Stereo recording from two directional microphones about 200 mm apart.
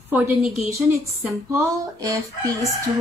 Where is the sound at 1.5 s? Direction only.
15° right (ahead or behind).